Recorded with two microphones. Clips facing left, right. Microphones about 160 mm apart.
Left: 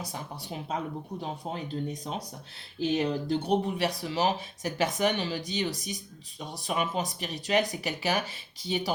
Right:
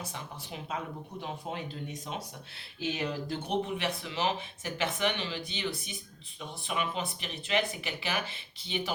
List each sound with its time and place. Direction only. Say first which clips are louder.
0.0 s speech: left 3 dB; 35° left (ahead or behind)